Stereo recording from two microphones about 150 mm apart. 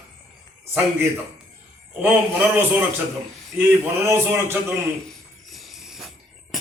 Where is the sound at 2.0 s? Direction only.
10° right (ahead or behind).